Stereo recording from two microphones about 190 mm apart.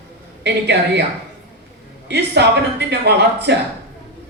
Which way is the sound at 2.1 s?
60° right (ahead or behind).